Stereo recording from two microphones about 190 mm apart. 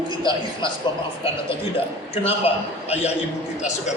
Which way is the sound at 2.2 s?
30° left (ahead or behind).